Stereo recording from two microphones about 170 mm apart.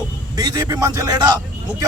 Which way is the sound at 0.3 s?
20° right (ahead or behind).